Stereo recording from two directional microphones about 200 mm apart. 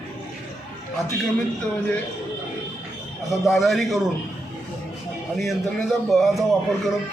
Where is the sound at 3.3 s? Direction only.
Centre (ahead or behind).